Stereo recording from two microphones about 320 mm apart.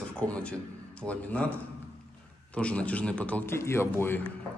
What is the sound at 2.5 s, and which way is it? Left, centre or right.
A man's voice, centre.